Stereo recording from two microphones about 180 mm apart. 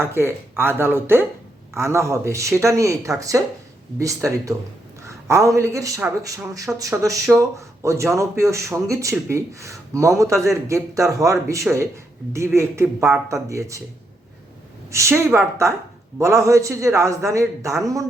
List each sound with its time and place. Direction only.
0.0 s a man's voice: 15° right (ahead or behind)
14.8 s a man's voice: 15° right (ahead or behind)